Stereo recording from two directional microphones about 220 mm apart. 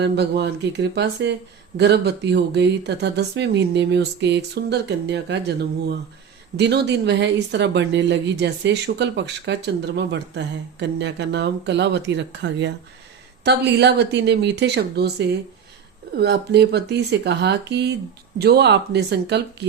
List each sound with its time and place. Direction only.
0.0 s speech: 50° right (ahead or behind)